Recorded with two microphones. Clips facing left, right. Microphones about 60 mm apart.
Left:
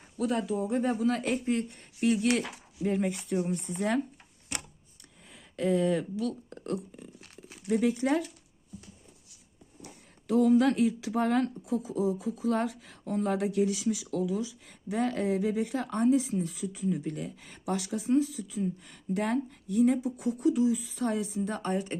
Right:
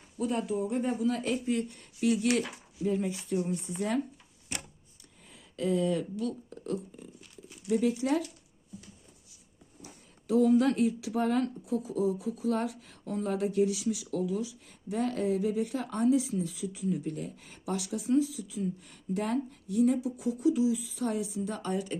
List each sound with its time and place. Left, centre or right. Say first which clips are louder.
0.2 s speech: left 1 dB; left
2.8 s speech: left 1 dB; left
3.8 s speech: left 2 dB; left
5.3 s a sound: left 2 dB; left
6.5 s speech: left 1 dB; left
7.4 s speech: left 1 dB; left
10.2 s speech: left 1 dB; left
10.8 s speech: left 1 dB; left
11.1 s speech: left 1 dB; left
11.6 s speech: left 1 dB; left
12.0 s speech: left 1 dB; left